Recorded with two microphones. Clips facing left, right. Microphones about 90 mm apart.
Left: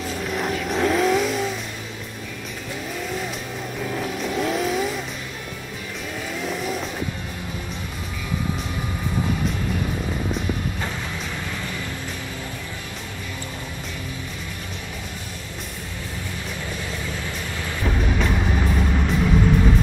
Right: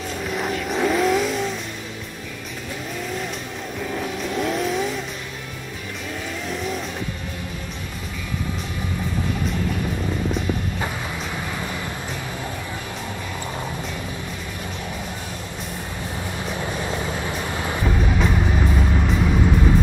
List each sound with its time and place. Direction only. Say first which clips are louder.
0.0 s vehicle: even; centre (ahead or behind)
3.8 s vehicle: even; centre (ahead or behind)
6.4 s vehicle: left 1 dB; centre (ahead or behind)
16.7 s vehicle: right 4 dB; 35° right (ahead or behind)
17.8 s music: even; 5° right (ahead or behind)